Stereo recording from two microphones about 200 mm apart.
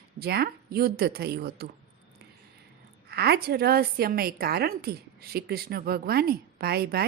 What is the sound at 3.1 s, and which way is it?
A woman's voice, 55° right (ahead or behind).